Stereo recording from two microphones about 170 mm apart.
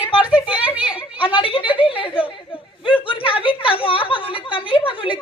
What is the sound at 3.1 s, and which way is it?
A woman's voice, 30° left (ahead or behind).